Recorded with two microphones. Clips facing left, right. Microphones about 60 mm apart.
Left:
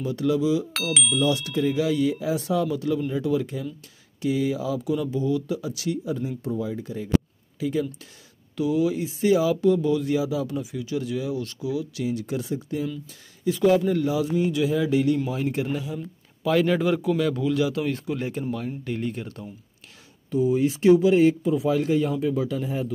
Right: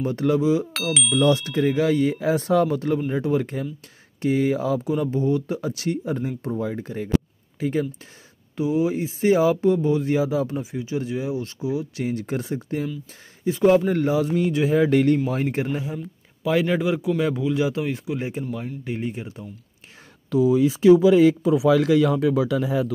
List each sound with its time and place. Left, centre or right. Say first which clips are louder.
0.0 s speech: right 2 dB; right
0.7 s chime: right 1 dB; centre
1.3 s speech: right 3 dB; right
8.5 s speech: right 1 dB; right
13.4 s a sound: right 2 dB; right
13.7 s speech: right 3 dB; right
14.9 s speech: right 3 dB; right
15.2 s speech: right 2 dB; right
16.4 s speech: even; centre
17.4 s speech: right 1 dB; right
20.3 s speech: right 3 dB; right